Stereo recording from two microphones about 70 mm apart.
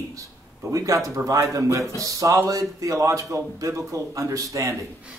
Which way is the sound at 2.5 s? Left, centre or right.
Right.